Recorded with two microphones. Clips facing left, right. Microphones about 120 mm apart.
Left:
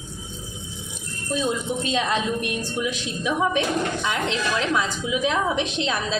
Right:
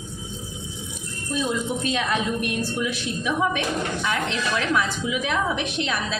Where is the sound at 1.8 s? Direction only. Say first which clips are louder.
Left 2 dB; 20° left (ahead or behind).